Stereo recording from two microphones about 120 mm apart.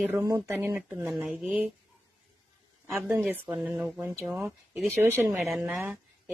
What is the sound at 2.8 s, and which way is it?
Speech, 15° right (ahead or behind).